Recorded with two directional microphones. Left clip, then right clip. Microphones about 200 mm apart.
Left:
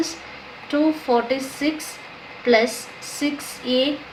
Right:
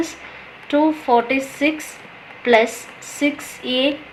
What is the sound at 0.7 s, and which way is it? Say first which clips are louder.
Speech: right 4 dB; 25° right (ahead or behind).